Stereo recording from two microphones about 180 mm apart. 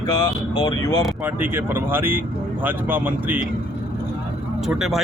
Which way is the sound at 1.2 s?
10° right (ahead or behind).